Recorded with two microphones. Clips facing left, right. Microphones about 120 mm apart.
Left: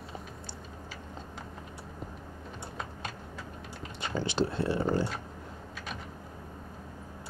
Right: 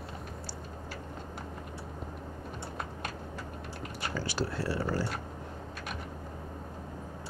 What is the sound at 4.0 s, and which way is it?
Speech, 20° left (ahead or behind).